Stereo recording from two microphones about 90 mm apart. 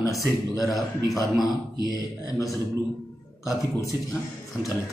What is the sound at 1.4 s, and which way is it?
A man's voice, 45° left (ahead or behind).